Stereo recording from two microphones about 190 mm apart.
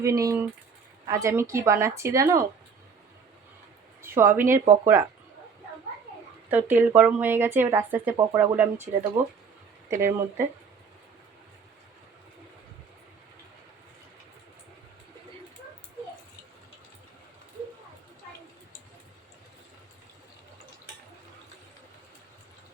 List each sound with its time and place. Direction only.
0.0 s speech: 15° right (ahead or behind)
4.0 s speech: 10° right (ahead or behind)
6.5 s speech: 10° right (ahead or behind)
9.9 s speech: 15° right (ahead or behind)